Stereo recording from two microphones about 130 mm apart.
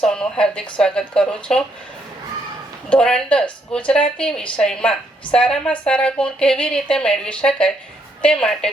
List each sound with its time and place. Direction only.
0.0 s speech: 5° left (ahead or behind)
2.9 s a woman's voice: 5° left (ahead or behind)